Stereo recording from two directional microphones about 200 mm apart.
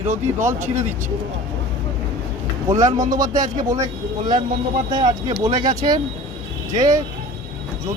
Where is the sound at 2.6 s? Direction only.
15° right (ahead or behind).